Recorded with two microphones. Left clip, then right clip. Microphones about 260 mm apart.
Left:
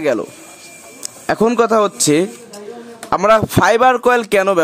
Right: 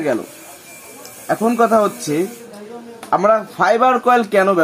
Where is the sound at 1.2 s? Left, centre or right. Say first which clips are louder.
Left 2 dB; left.